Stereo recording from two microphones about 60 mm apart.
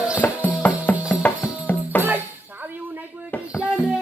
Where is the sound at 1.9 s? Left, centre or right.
Left.